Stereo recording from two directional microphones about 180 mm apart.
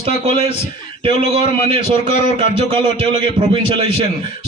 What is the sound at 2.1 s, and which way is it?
A man's voice, 30° right (ahead or behind).